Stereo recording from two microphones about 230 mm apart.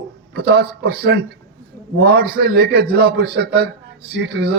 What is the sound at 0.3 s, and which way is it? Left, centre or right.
Speech, right.